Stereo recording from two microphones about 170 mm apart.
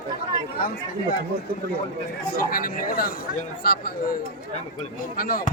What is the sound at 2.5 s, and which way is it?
A man's voice, 60° left (ahead or behind).